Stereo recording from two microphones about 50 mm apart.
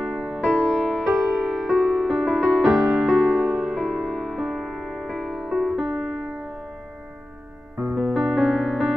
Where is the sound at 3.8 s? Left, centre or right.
Centre.